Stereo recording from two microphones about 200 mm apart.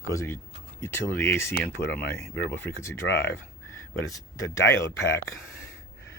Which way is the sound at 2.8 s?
15° left (ahead or behind).